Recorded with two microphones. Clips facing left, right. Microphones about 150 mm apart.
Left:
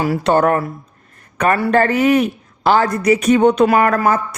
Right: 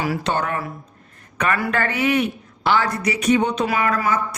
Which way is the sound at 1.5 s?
35° left (ahead or behind).